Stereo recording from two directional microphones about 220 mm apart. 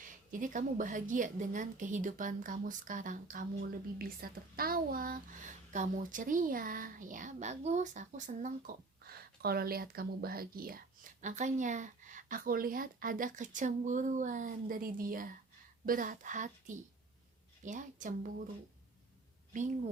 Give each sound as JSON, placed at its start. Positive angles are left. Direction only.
{"t": 0.0, "sound": "speech", "side_deg": -35}
{"t": 19.5, "sound": "speech", "side_deg": -35}